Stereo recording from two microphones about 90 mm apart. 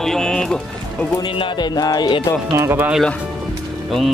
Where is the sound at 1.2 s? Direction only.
70° left (ahead or behind); by 2.1 s 50° left (ahead or behind).